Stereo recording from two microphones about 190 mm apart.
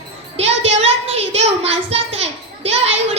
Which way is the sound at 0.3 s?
35° right (ahead or behind).